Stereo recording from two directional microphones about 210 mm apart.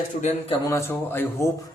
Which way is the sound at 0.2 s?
30° left (ahead or behind).